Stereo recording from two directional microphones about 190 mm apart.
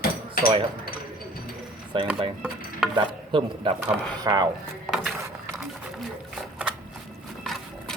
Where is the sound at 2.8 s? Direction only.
Centre (ahead or behind).